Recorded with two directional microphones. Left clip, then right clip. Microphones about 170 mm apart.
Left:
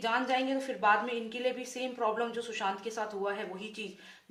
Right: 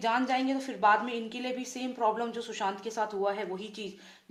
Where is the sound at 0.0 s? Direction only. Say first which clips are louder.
Right 2 dB; 40° right (ahead or behind).